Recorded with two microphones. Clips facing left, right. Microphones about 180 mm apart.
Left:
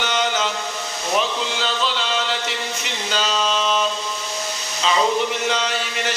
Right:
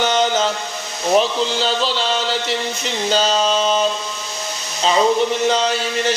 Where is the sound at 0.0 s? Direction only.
40° right (ahead or behind).